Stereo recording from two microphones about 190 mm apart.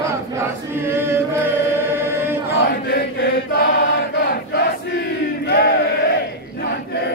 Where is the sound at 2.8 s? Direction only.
60° left (ahead or behind).